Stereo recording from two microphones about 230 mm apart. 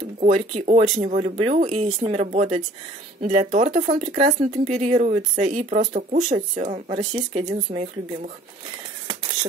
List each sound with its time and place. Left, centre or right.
0.2 s speech: right
3.9 s speech: centre
4.6 s speech: right